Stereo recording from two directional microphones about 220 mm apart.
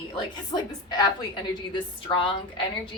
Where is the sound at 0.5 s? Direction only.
20° left (ahead or behind).